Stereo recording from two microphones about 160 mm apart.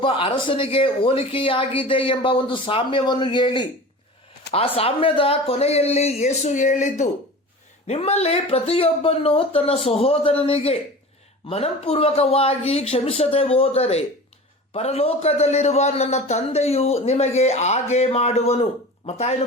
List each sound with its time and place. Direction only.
0.0 s a man's voice: 35° left (ahead or behind)